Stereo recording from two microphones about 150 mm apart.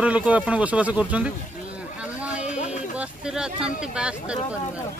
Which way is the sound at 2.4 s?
55° left (ahead or behind).